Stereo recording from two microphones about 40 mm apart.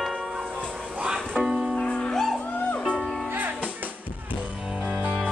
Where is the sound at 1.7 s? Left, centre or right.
Left.